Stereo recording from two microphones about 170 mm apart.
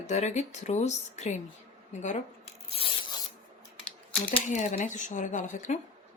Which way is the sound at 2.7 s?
30° left (ahead or behind).